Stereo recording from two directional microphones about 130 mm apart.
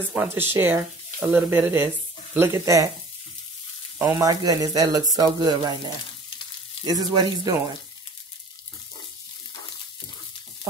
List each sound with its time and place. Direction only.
0.1 s speech: 15° right (ahead or behind)
4.0 s speech: 25° right (ahead or behind)
6.8 s speech: 30° right (ahead or behind)